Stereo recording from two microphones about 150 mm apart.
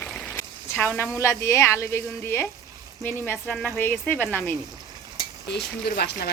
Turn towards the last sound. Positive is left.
turn(degrees=90)